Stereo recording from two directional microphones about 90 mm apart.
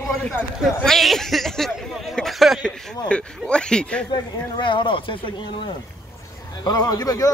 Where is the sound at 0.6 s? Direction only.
5° left (ahead or behind).